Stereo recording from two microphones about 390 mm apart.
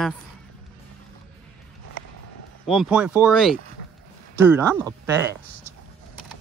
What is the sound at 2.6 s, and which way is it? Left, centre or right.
Speech, centre.